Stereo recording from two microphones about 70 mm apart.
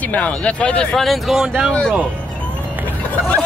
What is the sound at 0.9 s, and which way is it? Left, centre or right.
Speech, centre.